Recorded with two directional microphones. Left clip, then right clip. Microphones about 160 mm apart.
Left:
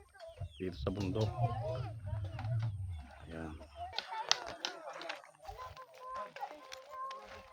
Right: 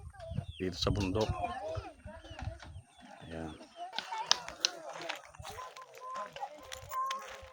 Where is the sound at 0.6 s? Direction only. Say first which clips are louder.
Right 5 dB; 30° right (ahead or behind).